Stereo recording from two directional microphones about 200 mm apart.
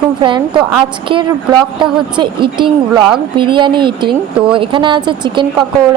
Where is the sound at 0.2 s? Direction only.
25° right (ahead or behind).